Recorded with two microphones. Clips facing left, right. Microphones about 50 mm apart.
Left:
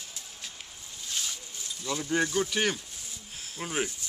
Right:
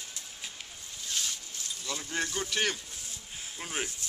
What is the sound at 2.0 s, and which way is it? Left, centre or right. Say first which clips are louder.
Speech: left 7 dB; centre.